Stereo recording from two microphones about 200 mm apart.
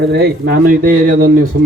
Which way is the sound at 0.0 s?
55° right (ahead or behind).